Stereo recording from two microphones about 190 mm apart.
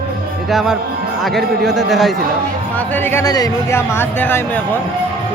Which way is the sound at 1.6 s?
Centre (ahead or behind).